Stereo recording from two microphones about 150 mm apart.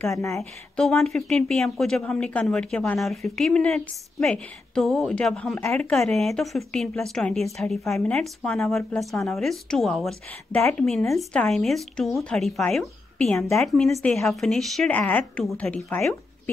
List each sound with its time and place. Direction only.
0.0 s a woman's voice: 20° left (ahead or behind)
0.4 s a woman's voice: 5° left (ahead or behind)